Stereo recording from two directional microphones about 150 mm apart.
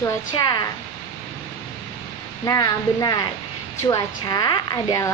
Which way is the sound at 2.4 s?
25° left (ahead or behind).